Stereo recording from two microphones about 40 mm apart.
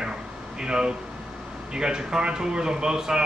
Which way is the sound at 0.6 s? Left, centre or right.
Right.